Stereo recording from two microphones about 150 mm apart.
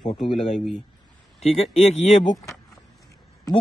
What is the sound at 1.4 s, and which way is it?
Speech, 40° left (ahead or behind).